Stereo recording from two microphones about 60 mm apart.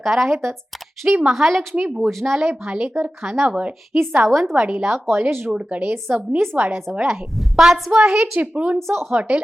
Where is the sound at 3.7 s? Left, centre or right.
Right.